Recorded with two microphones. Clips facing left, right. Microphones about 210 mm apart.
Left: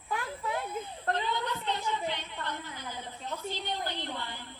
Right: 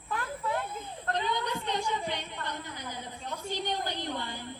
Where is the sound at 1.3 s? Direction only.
15° right (ahead or behind).